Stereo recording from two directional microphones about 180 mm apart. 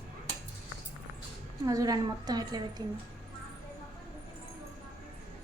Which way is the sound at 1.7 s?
20° right (ahead or behind).